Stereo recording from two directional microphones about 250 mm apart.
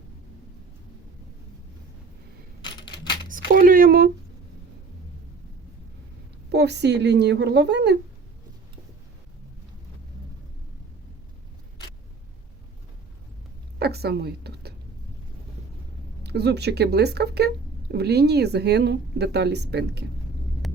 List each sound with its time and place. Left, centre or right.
2.6 s typewriter: centre
3.2 s a sound: right
6.5 s a woman's voice: right
13.7 s a sound: right
16.2 s speech: right
20.6 s vehicle: centre